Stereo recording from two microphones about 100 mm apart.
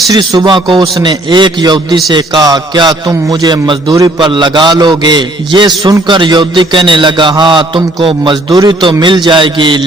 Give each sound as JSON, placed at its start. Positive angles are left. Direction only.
{"t": 0.2, "sound": "a man's voice", "side_deg": -50}
{"t": 3.5, "sound": "a man's voice", "side_deg": -45}